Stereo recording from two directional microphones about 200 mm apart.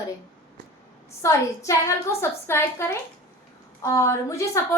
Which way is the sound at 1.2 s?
15° left (ahead or behind).